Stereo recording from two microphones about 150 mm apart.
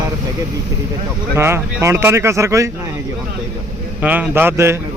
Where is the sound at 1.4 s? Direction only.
15° right (ahead or behind).